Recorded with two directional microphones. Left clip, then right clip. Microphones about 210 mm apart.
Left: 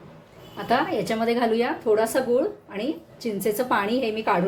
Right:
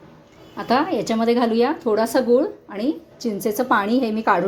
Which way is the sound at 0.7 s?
30° right (ahead or behind).